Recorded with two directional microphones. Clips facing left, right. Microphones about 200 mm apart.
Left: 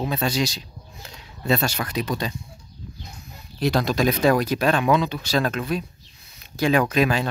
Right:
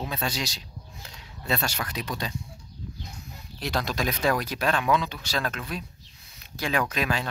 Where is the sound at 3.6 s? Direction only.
15° left (ahead or behind).